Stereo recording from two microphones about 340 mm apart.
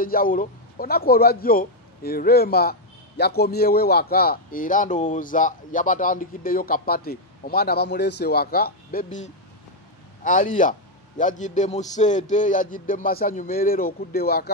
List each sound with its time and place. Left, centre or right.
0.0 s speech: left